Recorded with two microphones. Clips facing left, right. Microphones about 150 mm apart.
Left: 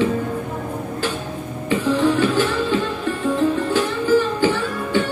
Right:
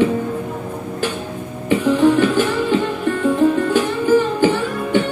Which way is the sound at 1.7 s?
15° right (ahead or behind).